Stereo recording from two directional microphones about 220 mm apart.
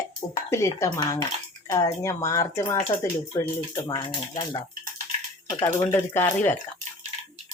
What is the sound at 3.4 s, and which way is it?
A woman's voice, 15° left (ahead or behind).